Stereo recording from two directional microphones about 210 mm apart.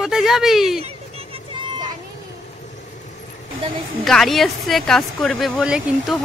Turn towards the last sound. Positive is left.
turn(degrees=0)  # may be behind; listen again after turning